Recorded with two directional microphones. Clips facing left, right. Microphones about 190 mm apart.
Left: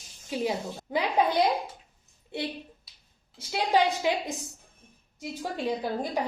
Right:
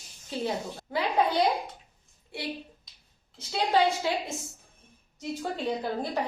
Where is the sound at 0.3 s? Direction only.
15° left (ahead or behind).